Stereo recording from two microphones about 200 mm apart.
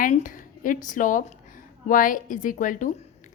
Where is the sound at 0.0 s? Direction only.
40° left (ahead or behind).